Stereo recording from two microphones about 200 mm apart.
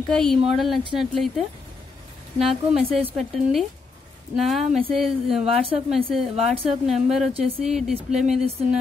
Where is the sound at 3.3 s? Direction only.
Centre (ahead or behind).